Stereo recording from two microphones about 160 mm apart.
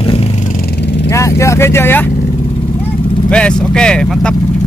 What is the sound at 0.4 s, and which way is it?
Vehicle, 60° left (ahead or behind).